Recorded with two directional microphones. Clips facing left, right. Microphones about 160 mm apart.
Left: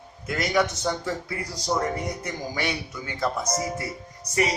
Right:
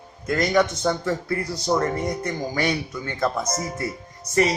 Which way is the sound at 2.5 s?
50° right (ahead or behind).